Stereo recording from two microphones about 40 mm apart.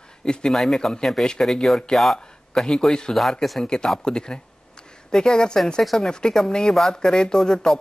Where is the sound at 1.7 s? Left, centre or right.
Centre.